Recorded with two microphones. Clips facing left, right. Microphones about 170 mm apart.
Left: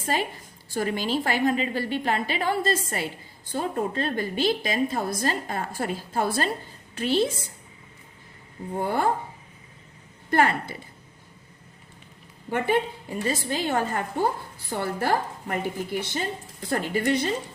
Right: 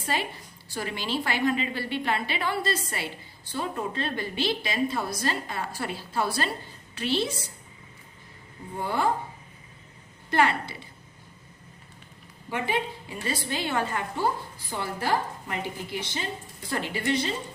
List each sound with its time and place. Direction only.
0.0 s a woman's voice: 45° left (ahead or behind)
8.7 s a woman's voice: 50° left (ahead or behind)
10.2 s a woman's voice: 50° left (ahead or behind)
12.5 s a woman's voice: 50° left (ahead or behind)